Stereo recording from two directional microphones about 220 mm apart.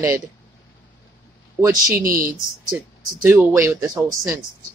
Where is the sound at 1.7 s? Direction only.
40° right (ahead or behind).